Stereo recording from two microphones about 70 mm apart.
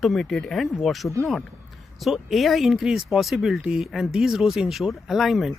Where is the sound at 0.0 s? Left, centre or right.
Centre.